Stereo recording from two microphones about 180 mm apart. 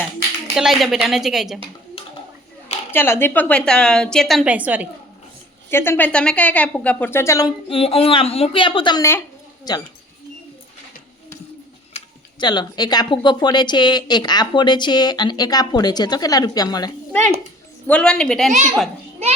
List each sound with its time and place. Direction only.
0.5 s a woman's voice: centre (ahead or behind)
2.9 s a woman's voice: 10° left (ahead or behind); by 4.9 s 10° right (ahead or behind)
5.7 s a woman's voice: 15° left (ahead or behind)
7.7 s speech: 30° left (ahead or behind)
11.9 s speech: 25° left (ahead or behind)
17.1 s a woman's voice: 5° left (ahead or behind)